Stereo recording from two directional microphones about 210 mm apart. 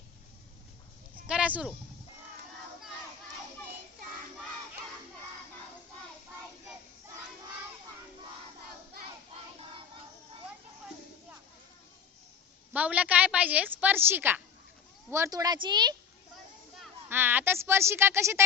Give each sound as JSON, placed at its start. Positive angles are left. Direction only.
{"t": 1.3, "sound": "a sound", "side_deg": -5}
{"t": 12.7, "sound": "a woman's voice", "side_deg": -5}
{"t": 17.1, "sound": "a woman's voice", "side_deg": -10}